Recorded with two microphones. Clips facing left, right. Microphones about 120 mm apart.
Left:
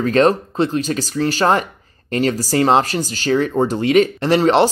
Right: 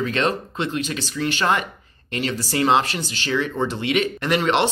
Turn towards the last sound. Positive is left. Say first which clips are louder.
# left 6 dB
turn(degrees=35)  # may be behind; listen again after turning